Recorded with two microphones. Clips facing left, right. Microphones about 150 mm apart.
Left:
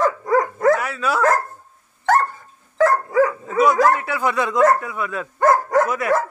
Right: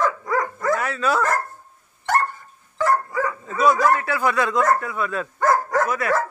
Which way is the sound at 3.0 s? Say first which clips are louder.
Left 8 dB; 90° left.